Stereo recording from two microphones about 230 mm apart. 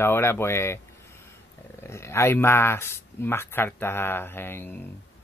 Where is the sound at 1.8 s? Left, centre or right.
Centre.